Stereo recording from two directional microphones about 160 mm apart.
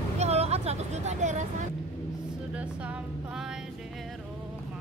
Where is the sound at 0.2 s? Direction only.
40° right (ahead or behind).